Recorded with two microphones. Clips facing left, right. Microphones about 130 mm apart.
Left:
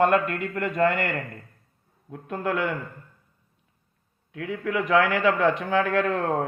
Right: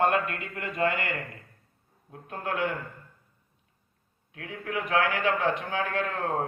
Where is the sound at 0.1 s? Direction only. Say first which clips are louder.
Left 5 dB; 55° left (ahead or behind).